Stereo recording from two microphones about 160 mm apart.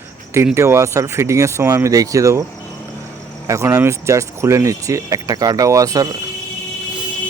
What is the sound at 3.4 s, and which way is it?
Speech, 20° right (ahead or behind).